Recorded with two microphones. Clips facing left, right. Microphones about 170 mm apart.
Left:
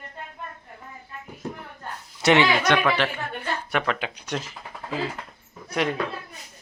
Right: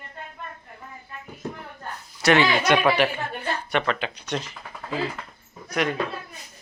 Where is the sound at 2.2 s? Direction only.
20° left (ahead or behind).